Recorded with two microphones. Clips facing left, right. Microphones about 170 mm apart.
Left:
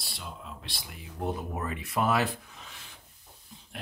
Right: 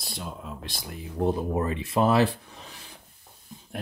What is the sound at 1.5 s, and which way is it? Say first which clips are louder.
Speech: right 7 dB; 30° right (ahead or behind).